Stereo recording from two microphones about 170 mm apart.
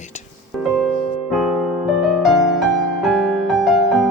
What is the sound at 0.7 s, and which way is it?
Music, centre (ahead or behind).